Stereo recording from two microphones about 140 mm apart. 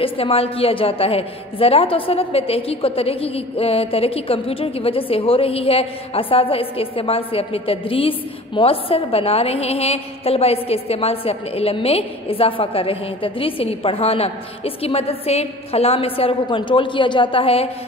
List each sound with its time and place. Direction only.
0.0 s a woman's voice: 45° left (ahead or behind)